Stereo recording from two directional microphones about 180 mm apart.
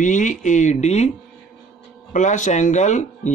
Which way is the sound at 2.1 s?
45° left (ahead or behind).